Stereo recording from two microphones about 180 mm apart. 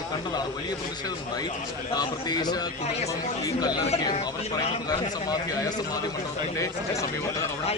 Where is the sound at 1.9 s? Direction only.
20° left (ahead or behind).